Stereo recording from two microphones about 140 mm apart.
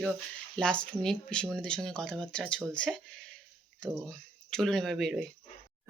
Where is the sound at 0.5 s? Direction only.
5° left (ahead or behind).